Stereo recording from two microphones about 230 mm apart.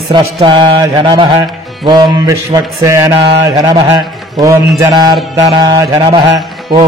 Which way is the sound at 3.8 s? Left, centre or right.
Centre.